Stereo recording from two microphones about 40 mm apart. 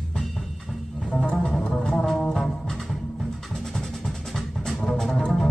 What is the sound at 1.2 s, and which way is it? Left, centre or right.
Music, left.